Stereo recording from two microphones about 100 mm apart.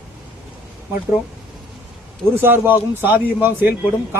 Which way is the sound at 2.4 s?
20° right (ahead or behind).